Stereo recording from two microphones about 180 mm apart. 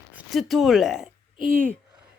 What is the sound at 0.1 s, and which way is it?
Speech, 5° right (ahead or behind).